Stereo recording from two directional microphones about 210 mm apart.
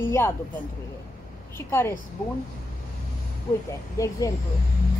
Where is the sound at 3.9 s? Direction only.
15° left (ahead or behind).